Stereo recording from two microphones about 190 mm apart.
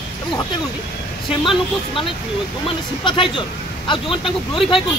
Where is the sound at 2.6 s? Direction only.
25° left (ahead or behind).